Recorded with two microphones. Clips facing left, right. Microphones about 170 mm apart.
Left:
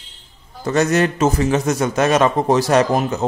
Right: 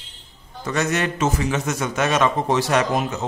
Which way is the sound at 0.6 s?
35° left (ahead or behind).